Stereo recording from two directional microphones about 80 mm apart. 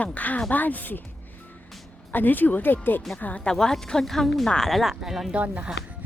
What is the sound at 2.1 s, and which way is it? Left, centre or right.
Speech, left.